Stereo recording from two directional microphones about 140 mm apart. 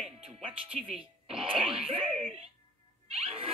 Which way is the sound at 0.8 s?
55° right (ahead or behind).